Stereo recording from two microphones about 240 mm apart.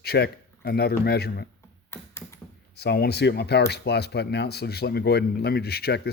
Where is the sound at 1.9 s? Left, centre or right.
Centre.